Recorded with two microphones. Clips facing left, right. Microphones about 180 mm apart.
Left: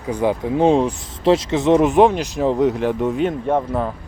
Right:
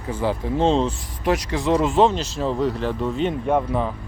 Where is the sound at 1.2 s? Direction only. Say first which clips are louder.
Left 6 dB; 25° left (ahead or behind).